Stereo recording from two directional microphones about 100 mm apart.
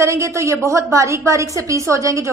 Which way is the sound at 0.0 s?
30° right (ahead or behind).